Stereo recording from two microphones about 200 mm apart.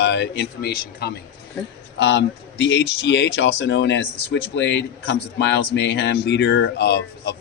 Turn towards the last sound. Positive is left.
turn(degrees=55)  # may be behind; listen again after turning